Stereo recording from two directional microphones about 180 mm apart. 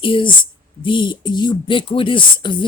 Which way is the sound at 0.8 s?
25° left (ahead or behind).